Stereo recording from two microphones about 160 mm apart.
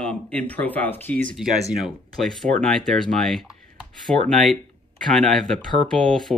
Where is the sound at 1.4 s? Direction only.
Centre (ahead or behind).